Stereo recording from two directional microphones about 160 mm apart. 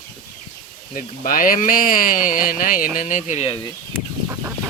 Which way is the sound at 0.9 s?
55° left (ahead or behind).